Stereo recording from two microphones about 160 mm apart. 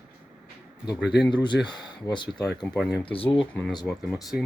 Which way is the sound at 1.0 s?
90° left.